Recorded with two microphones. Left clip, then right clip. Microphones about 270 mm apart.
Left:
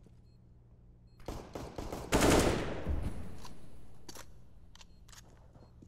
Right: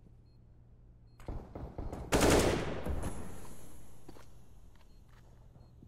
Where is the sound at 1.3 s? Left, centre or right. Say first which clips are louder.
Left 4 dB; left.